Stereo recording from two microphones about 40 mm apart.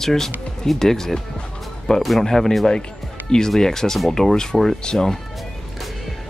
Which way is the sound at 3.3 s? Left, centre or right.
Left.